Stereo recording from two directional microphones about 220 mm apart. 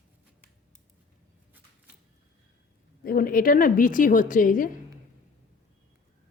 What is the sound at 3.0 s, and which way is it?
A woman's voice, 40° left (ahead or behind).